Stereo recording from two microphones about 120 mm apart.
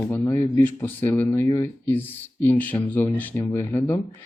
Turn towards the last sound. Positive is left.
turn(degrees=20)  # may be behind; listen again after turning